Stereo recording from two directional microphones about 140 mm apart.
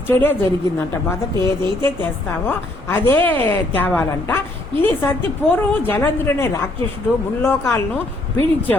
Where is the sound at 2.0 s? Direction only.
15° left (ahead or behind).